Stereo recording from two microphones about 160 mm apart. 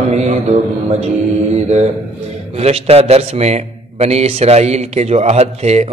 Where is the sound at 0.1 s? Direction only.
45° right (ahead or behind).